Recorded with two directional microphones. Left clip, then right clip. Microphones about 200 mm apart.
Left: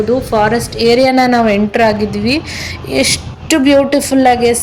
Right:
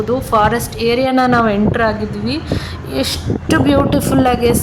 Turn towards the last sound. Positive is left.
turn(degrees=5)  # may be behind; listen again after turning